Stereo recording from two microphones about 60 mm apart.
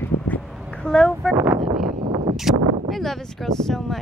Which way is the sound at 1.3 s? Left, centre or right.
Right.